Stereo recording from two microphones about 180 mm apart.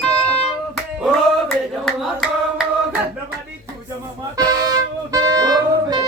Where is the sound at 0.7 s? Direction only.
Centre (ahead or behind).